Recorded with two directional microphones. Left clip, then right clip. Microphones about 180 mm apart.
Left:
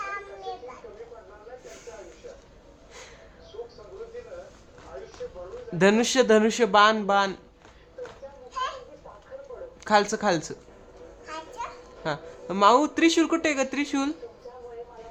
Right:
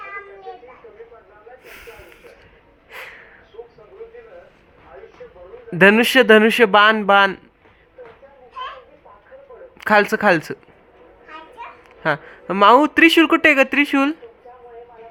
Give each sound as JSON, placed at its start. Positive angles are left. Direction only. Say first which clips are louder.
{"t": 1.6, "sound": "snake", "louder": "right 4 dB", "side_deg": -10}
{"t": 2.9, "sound": "a sound", "louder": "right 11 dB", "side_deg": -25}
{"t": 5.7, "sound": "a man's voice", "louder": "right 9 dB", "side_deg": -20}
{"t": 9.8, "sound": "a man's voice", "louder": "right 8 dB", "side_deg": -25}
{"t": 12.0, "sound": "a man's voice", "louder": "right 10 dB", "side_deg": -20}